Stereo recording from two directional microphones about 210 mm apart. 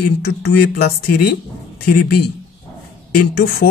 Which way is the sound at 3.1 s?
45° left (ahead or behind).